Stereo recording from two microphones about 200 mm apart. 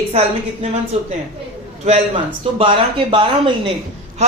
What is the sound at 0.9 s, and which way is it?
A man's voice, 30° right (ahead or behind).